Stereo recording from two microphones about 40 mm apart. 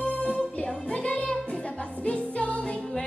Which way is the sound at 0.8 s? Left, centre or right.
Left.